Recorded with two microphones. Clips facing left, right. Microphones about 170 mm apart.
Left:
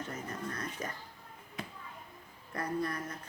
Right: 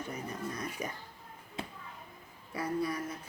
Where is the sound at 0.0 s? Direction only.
10° right (ahead or behind).